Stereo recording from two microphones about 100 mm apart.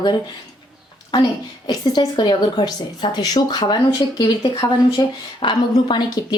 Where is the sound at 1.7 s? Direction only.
45° left (ahead or behind).